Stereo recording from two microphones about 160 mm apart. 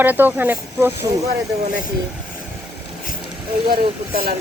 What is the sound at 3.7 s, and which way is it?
Speech, 70° right (ahead or behind).